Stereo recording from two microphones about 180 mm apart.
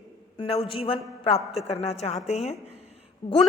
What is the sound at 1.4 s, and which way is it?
Speech, centre (ahead or behind).